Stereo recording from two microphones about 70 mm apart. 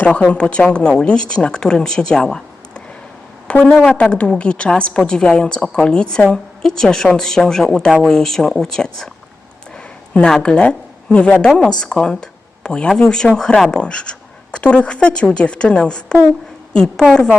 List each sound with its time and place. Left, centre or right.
0.3 s a woman's voice: centre